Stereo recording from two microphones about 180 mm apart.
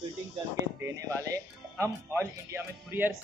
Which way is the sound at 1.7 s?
15° right (ahead or behind).